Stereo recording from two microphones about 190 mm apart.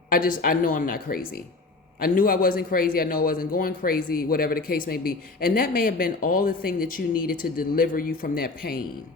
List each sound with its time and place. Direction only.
0.1 s a man's voice: 50° left (ahead or behind)